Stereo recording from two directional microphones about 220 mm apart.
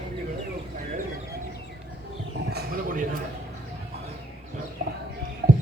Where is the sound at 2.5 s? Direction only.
40° right (ahead or behind).